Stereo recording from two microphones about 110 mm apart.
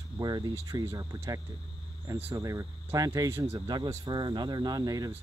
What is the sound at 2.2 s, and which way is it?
Speech, 25° right (ahead or behind).